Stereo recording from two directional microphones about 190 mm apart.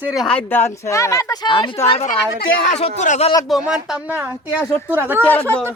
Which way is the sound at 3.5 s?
5° right (ahead or behind).